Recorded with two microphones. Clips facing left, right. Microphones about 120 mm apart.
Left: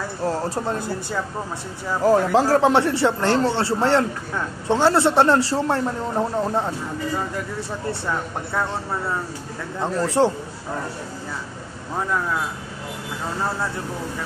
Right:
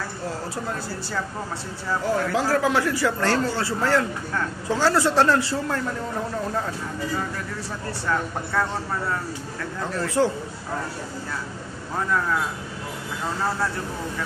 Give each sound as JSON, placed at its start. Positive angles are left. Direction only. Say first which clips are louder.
{"t": 2.0, "sound": "speech", "louder": "left 7 dB", "side_deg": 35}
{"t": 5.4, "sound": "a man's voice", "louder": "left 5 dB", "side_deg": 35}
{"t": 9.8, "sound": "speech", "louder": "left 4 dB", "side_deg": 30}